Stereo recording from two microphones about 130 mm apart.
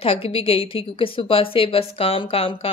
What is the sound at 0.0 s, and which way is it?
A woman's voice, 45° left (ahead or behind).